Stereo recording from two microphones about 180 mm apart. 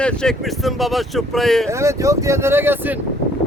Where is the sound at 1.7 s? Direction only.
15° right (ahead or behind).